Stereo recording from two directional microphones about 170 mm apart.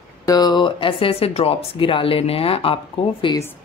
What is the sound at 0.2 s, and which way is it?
Speech, 20° left (ahead or behind).